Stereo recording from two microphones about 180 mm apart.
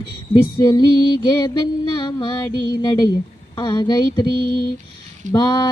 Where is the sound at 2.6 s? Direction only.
20° left (ahead or behind).